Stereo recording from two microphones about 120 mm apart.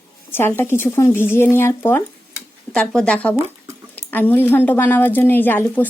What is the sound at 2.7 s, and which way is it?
A woman's voice, 5° left (ahead or behind).